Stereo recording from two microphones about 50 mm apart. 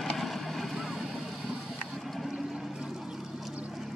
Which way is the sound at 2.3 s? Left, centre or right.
Centre.